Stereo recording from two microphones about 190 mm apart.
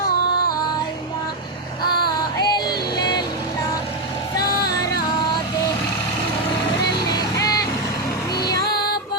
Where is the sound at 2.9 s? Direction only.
20° left (ahead or behind).